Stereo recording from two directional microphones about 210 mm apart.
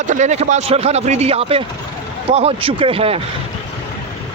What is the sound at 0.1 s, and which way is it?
Speech, 35° right (ahead or behind).